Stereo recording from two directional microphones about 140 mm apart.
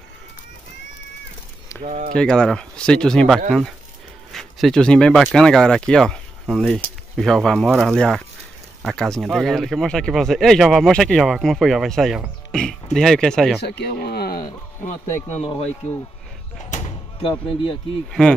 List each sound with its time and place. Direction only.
1.8 s speech: 55° right (ahead or behind)
2.1 s speech: 5° left (ahead or behind)
12.4 s music: 5° left (ahead or behind)
12.9 s speech: 5° left (ahead or behind)
13.9 s speech: 90° left
15.0 s speech: 15° left (ahead or behind)
15.4 s speech: 35° left (ahead or behind)
16.7 s a sound: 60° left (ahead or behind)
17.2 s speech: 35° left (ahead or behind)
18.2 s speech: 5° left (ahead or behind)